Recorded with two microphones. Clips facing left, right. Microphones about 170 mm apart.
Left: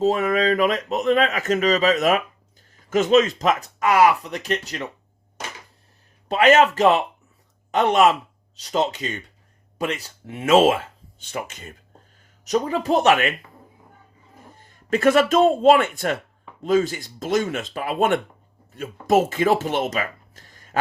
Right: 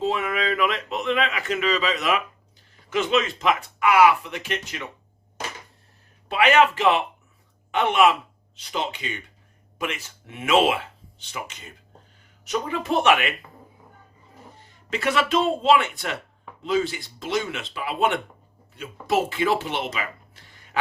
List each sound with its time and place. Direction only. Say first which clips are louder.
0.0 s speech: left 6 dB; 40° left (ahead or behind)
6.2 s speech: left 3 dB; 40° left (ahead or behind)
12.5 s speech: left 5 dB; 40° left (ahead or behind)
14.6 s speech: left 8 dB; 50° left (ahead or behind)